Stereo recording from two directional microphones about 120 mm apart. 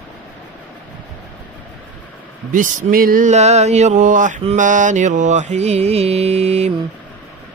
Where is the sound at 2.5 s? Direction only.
90° right; by 6.7 s 65° right (ahead or behind).